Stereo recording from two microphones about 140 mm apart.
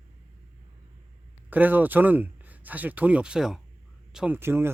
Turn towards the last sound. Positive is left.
turn(degrees=-15)  # may be behind; listen again after turning